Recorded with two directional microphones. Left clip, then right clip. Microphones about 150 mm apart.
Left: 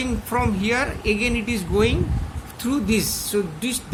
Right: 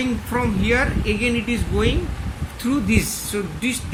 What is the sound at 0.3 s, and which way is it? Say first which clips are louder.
Speech: right 1 dB; 90° left.